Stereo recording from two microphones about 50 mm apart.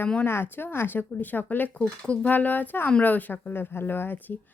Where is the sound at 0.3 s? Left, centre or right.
Left.